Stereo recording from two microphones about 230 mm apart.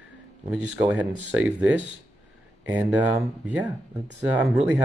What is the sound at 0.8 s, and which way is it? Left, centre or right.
Speech, centre.